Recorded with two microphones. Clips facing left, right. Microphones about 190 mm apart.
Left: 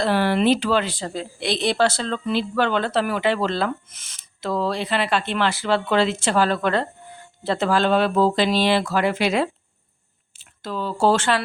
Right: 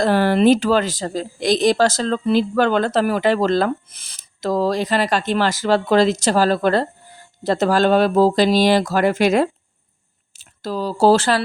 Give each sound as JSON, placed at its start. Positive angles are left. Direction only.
{"t": 0.0, "sound": "a woman's voice", "side_deg": -45}